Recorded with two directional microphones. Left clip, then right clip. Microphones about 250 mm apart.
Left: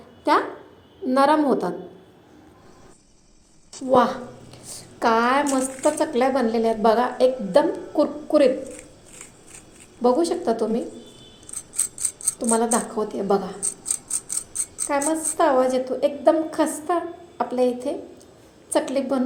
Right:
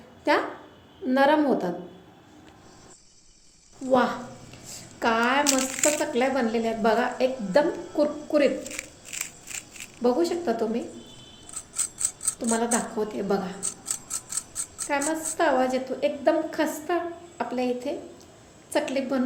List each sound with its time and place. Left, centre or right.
0.3 s a sound: centre
1.0 s speech: centre
3.8 s speech: centre
10.0 s speech: centre
12.7 s speech: centre
14.8 s speech: centre